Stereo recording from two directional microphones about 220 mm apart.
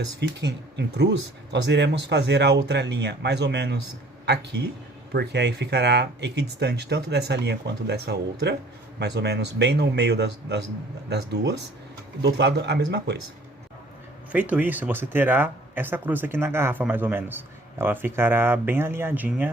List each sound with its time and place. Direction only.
0.2 s speech: 50° right (ahead or behind)
14.3 s speech: 5° right (ahead or behind)